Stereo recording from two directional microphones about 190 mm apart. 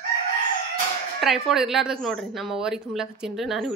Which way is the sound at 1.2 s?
Centre (ahead or behind).